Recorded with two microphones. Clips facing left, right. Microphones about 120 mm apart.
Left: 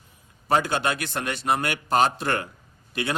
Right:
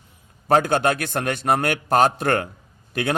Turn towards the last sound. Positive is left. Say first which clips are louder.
# right 4 dB
turn(degrees=-50)  # may be behind; listen again after turning